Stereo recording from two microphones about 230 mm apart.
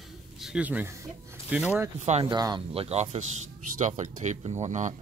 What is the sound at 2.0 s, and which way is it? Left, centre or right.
Speech, right.